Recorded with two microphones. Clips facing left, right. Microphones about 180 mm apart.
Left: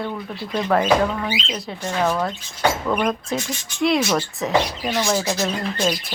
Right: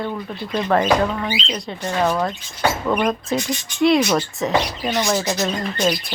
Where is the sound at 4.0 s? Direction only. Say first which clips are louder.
Right 2 dB; 15° right (ahead or behind).